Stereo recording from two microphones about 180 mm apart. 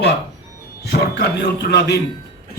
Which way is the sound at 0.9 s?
65° left (ahead or behind).